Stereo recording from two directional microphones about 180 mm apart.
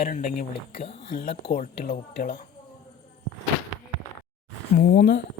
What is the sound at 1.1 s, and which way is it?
Speech, 60° left (ahead or behind).